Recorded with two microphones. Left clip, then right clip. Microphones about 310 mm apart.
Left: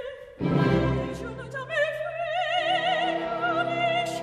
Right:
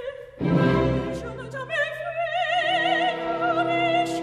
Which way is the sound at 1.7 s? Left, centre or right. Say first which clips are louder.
Even; right.